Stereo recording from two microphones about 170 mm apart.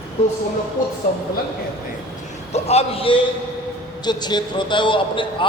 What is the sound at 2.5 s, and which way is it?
A man's voice, 40° left (ahead or behind).